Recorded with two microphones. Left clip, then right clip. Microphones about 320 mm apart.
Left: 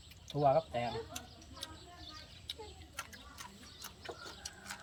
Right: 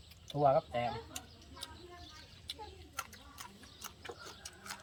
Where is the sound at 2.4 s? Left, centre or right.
Centre.